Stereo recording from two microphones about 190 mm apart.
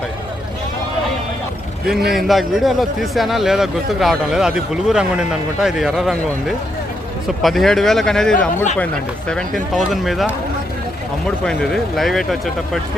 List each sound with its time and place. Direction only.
1.9 s a man's voice: centre (ahead or behind)
7.4 s a man's voice: centre (ahead or behind)